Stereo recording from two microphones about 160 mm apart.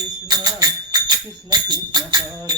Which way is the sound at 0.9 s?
25° right (ahead or behind).